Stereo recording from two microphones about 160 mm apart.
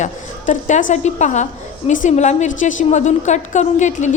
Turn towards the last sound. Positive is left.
turn(degrees=50)  # may be behind; listen again after turning